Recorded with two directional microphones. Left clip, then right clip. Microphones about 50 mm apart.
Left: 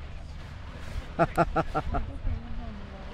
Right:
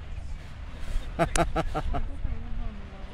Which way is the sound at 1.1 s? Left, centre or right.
Right.